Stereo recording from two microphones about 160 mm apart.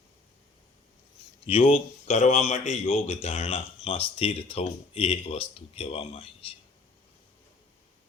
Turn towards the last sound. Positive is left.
turn(degrees=35)  # may be behind; listen again after turning